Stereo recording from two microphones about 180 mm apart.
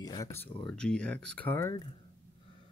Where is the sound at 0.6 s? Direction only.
5° left (ahead or behind).